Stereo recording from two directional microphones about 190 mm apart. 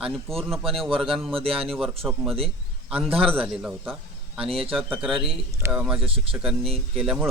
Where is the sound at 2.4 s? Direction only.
30° right (ahead or behind).